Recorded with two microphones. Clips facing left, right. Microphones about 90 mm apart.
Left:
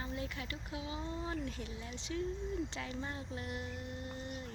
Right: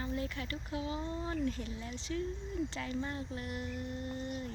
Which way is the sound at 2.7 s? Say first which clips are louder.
Right 4 dB; 15° left (ahead or behind).